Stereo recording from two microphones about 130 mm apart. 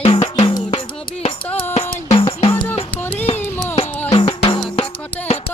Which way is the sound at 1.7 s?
55° left (ahead or behind).